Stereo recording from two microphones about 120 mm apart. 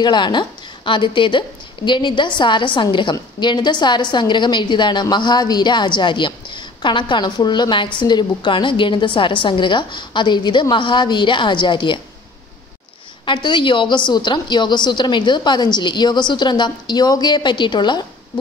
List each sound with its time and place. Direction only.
0.0 s a woman's voice: 40° left (ahead or behind)
13.2 s a woman's voice: 40° left (ahead or behind)